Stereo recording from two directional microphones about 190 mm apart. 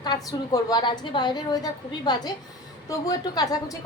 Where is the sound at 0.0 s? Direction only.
20° left (ahead or behind).